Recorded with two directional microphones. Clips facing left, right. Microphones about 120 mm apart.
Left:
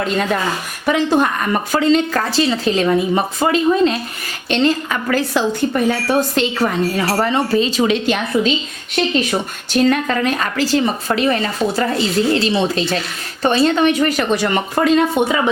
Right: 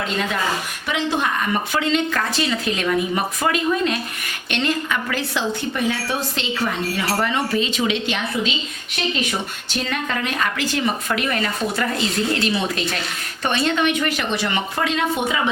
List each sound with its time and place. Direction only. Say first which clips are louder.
0.9 s a woman's voice: left 7 dB; 45° left (ahead or behind)